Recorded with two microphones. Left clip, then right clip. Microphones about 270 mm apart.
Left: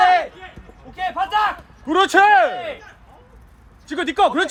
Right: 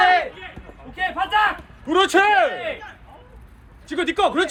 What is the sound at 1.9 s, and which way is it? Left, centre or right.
Speech, left.